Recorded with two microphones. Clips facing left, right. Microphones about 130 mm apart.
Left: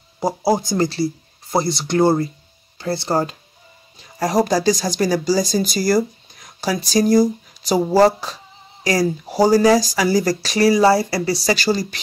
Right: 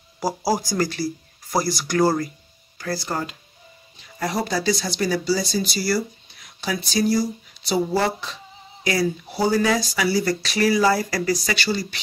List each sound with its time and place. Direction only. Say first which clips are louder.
0.2 s speech: left 4 dB; 25° left (ahead or behind); by 12.0 s 40° left (ahead or behind)